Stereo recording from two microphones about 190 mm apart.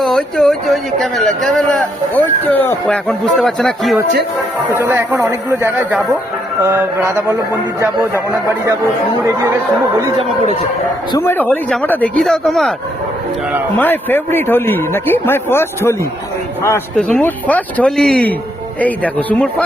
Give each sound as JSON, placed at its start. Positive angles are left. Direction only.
{"t": 0.0, "sound": "a man's voice", "side_deg": 0}
{"t": 4.7, "sound": "speech", "side_deg": -10}
{"t": 10.2, "sound": "speech", "side_deg": -30}
{"t": 11.1, "sound": "speech", "side_deg": 10}
{"t": 13.7, "sound": "speech", "side_deg": 10}